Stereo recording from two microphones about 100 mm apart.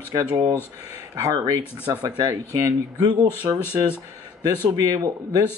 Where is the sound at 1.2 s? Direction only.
35° right (ahead or behind).